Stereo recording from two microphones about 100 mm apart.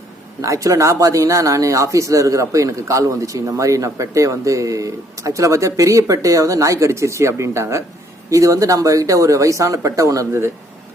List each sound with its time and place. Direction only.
0.4 s speech: 30° right (ahead or behind)